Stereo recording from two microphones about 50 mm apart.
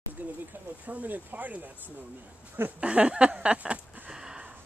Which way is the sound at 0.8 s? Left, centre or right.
Right.